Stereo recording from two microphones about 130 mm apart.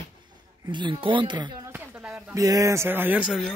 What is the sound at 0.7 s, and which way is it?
Speech, 35° right (ahead or behind).